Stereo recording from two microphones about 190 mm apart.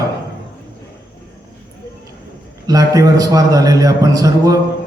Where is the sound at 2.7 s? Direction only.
20° right (ahead or behind).